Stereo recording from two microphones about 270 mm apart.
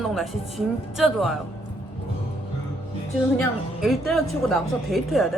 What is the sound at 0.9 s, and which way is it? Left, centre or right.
Speech, centre.